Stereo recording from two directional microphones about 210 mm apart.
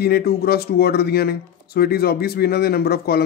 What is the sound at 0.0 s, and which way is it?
Speech, 50° left (ahead or behind).